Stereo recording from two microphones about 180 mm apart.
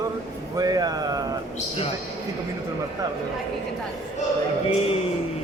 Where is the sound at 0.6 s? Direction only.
20° right (ahead or behind).